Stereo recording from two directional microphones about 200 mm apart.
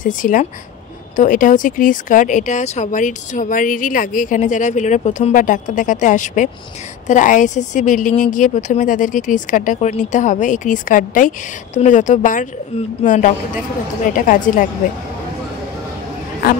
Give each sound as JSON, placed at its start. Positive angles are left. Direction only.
{"t": 0.0, "sound": "speech", "side_deg": 40}